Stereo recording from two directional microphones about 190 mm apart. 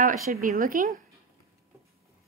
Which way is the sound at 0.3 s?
45° right (ahead or behind).